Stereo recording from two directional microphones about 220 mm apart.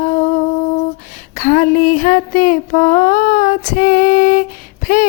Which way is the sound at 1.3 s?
40° left (ahead or behind).